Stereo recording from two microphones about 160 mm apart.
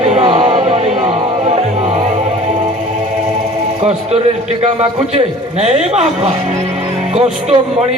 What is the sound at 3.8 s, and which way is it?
Speech, 40° right (ahead or behind).